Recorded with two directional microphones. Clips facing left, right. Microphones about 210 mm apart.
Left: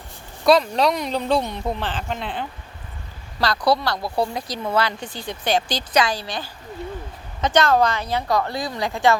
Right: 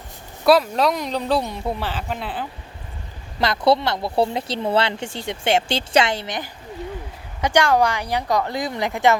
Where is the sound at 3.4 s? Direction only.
25° right (ahead or behind).